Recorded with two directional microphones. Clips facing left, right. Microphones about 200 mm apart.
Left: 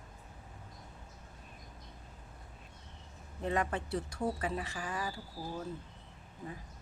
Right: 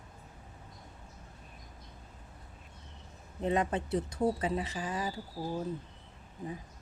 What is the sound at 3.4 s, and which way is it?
Speech, 20° right (ahead or behind).